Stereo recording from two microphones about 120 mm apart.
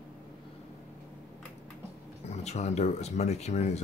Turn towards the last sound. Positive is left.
turn(degrees=65)  # may be behind; listen again after turning